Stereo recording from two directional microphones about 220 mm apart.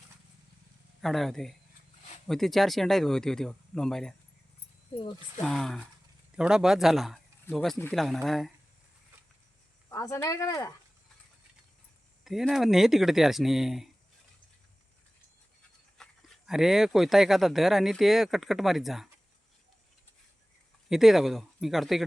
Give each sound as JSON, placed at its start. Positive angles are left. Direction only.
{"t": 1.0, "sound": "speech", "side_deg": 0}
{"t": 5.4, "sound": "speech", "side_deg": 0}
{"t": 9.9, "sound": "speech", "side_deg": 15}
{"t": 12.2, "sound": "speech", "side_deg": 0}
{"t": 16.0, "sound": "speech", "side_deg": 0}
{"t": 20.9, "sound": "speech", "side_deg": 0}